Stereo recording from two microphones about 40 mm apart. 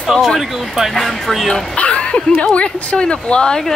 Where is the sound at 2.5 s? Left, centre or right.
Left.